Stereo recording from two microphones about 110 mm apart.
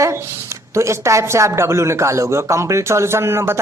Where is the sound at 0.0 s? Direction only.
25° right (ahead or behind).